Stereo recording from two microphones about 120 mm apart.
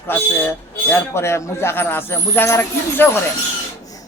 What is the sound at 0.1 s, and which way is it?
A man's voice, 20° left (ahead or behind).